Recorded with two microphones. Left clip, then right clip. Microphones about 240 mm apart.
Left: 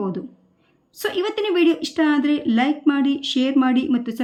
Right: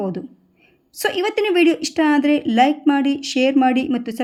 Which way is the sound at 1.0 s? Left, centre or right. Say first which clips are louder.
Right 3 dB; centre.